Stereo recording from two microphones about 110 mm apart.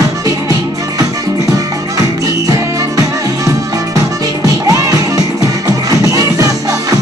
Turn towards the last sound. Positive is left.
turn(degrees=-30)  # may be behind; listen again after turning